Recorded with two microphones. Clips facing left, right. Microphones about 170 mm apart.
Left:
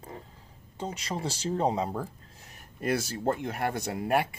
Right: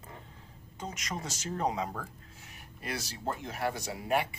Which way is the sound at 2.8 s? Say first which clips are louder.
Left 9 dB; 50° left (ahead or behind).